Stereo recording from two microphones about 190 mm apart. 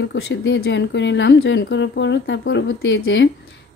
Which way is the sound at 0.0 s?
65° left (ahead or behind).